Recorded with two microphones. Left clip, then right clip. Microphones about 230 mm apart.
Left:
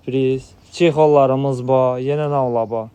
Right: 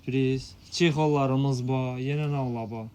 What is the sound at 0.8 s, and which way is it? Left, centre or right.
Speech, centre.